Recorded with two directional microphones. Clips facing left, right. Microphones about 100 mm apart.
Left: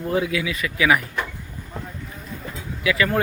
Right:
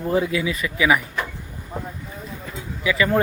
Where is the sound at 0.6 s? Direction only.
15° right (ahead or behind).